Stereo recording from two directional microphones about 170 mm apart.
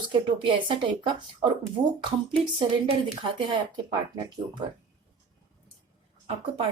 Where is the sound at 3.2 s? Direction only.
25° right (ahead or behind).